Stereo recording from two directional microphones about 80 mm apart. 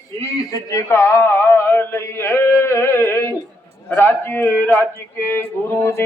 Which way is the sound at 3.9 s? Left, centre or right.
Left.